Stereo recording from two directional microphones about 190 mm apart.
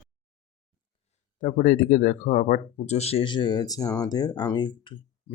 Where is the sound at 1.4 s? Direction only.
45° left (ahead or behind).